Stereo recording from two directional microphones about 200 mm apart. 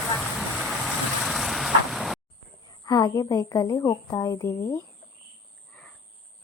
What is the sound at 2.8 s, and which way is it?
A woman's voice, 20° left (ahead or behind).